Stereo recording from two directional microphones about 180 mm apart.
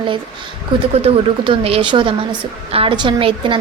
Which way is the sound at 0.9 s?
35° right (ahead or behind).